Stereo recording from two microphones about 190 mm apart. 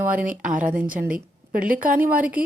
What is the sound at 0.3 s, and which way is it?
Speech, 45° right (ahead or behind).